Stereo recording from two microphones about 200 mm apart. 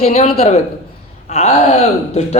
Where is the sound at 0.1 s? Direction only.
35° left (ahead or behind).